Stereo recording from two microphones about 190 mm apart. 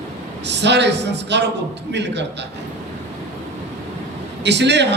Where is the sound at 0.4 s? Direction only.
65° right (ahead or behind).